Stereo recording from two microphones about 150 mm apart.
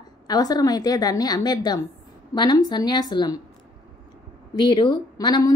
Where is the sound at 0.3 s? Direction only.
25° left (ahead or behind).